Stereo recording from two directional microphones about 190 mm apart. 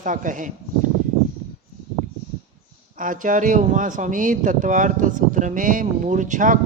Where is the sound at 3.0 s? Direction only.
45° right (ahead or behind).